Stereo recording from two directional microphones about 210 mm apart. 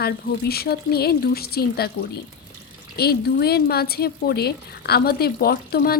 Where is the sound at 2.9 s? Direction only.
50° left (ahead or behind).